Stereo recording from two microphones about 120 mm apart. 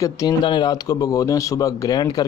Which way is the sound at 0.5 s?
35° left (ahead or behind).